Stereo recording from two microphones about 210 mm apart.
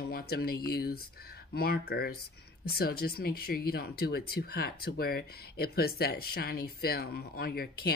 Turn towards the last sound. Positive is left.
turn(degrees=45)  # may be behind; listen again after turning